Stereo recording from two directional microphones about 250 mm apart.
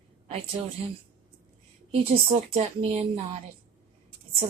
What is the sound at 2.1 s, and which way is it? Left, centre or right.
A woman's voice, right.